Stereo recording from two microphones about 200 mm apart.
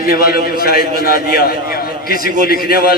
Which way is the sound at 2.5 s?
50° left (ahead or behind).